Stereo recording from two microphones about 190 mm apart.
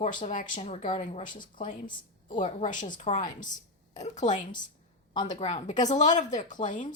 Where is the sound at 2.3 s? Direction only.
40° left (ahead or behind).